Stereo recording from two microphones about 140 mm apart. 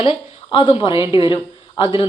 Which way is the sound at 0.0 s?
40° left (ahead or behind).